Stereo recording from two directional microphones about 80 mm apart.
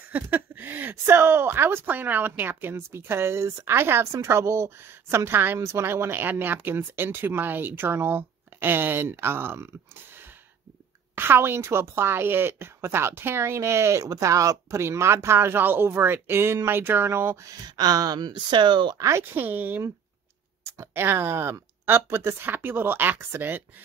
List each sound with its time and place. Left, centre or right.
0.1 s speech: right
11.1 s a woman's voice: right
17.5 s speech: right
18.9 s a woman's voice: right
19.3 s speech: right
20.6 s speech: right